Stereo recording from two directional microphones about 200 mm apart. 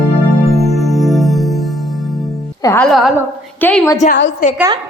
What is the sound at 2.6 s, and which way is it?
A woman's voice, 15° left (ahead or behind).